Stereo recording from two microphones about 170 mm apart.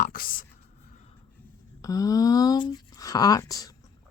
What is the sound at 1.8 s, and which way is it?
Speech, 20° left (ahead or behind).